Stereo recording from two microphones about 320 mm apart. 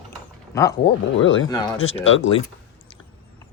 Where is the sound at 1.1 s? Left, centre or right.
Left.